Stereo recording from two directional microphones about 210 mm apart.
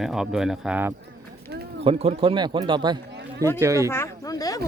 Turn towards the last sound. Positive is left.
turn(degrees=15)  # may be behind; listen again after turning